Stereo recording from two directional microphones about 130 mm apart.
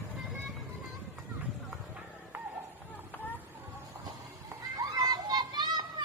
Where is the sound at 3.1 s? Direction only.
15° left (ahead or behind).